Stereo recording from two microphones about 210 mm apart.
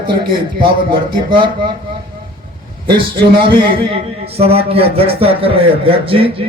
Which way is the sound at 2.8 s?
25° right (ahead or behind).